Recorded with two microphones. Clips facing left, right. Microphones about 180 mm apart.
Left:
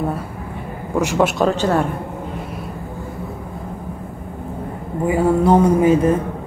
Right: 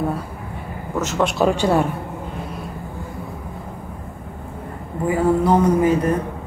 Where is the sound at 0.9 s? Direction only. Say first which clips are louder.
Left 4 dB; 10° left (ahead or behind).